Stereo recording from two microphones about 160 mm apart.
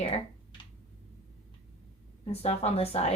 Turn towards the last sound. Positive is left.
turn(degrees=40)  # may be behind; listen again after turning